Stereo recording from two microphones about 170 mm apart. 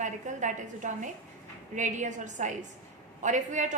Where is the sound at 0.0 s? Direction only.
45° right (ahead or behind).